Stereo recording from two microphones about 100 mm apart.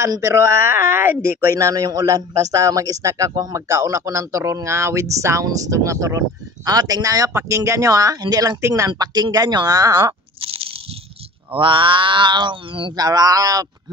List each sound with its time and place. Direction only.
0.0 s speech: 30° right (ahead or behind)
1.5 s a man's voice: 35° right (ahead or behind)
8.9 s speech: 45° right (ahead or behind)
10.4 s biting: 65° right (ahead or behind)
11.5 s speech: 60° right (ahead or behind)
12.9 s a man's voice: 40° right (ahead or behind)